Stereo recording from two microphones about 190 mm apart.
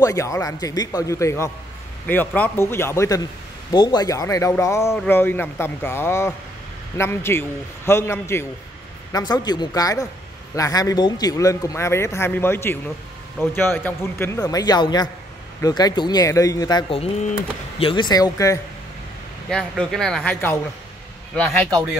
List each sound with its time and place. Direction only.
0.0 s a man's voice: 15° left (ahead or behind)
19.5 s a man's voice: centre (ahead or behind)